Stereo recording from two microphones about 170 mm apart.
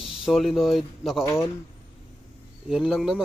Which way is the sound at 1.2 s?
20° left (ahead or behind).